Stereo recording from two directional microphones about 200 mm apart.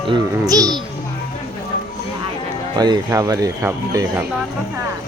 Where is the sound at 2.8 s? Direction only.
20° right (ahead or behind).